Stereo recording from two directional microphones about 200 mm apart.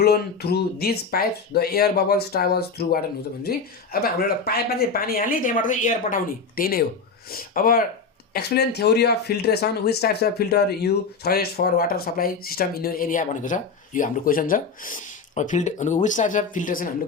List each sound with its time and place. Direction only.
0.0 s speech: 55° left (ahead or behind)